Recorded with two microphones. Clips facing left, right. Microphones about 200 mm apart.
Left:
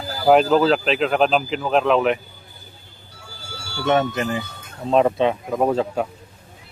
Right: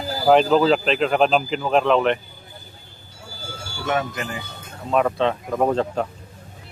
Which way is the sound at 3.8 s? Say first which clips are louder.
Left 5 dB; 30° left (ahead or behind).